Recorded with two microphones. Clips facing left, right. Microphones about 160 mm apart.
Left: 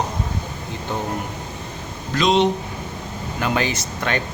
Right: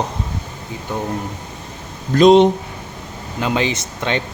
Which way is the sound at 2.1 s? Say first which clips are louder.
Right 8 dB; 50° right (ahead or behind).